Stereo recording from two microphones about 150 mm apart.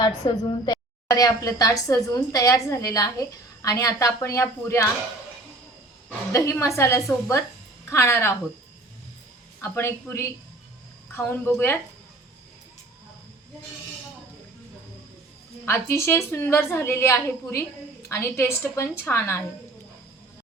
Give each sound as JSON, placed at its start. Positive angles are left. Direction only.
{"t": 0.2, "sound": "a woman's voice", "side_deg": 30}
{"t": 6.3, "sound": "a woman's voice", "side_deg": 20}
{"t": 9.6, "sound": "a woman's voice", "side_deg": 20}
{"t": 15.6, "sound": "a woman's voice", "side_deg": 15}